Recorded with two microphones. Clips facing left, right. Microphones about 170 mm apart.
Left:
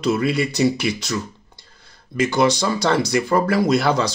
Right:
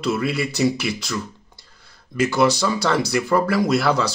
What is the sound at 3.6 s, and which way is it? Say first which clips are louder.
Speech: left 1 dB; centre (ahead or behind).